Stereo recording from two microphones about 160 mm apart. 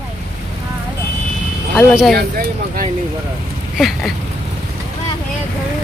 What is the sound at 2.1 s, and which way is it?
Speech, 75° right (ahead or behind).